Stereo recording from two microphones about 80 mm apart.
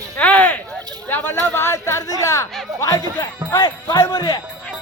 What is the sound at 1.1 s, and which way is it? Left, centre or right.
Speech, left.